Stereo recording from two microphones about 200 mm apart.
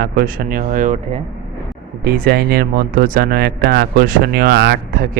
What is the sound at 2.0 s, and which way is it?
Speech, 50° right (ahead or behind).